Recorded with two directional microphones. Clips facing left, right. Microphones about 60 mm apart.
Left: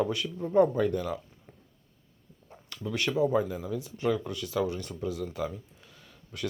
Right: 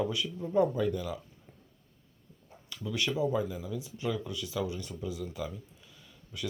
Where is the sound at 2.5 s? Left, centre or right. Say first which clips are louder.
Left 4 dB; left.